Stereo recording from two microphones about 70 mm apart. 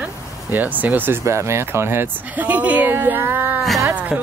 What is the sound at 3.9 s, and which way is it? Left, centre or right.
Music, centre.